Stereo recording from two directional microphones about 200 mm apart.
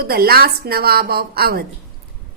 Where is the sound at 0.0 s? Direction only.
50° right (ahead or behind).